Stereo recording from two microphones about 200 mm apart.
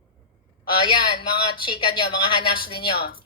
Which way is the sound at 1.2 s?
25° left (ahead or behind).